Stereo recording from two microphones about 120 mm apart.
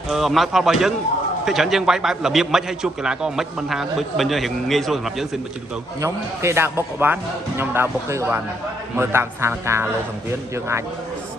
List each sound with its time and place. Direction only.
0.1 s a man's voice: centre (ahead or behind)
5.9 s speech: 25° right (ahead or behind)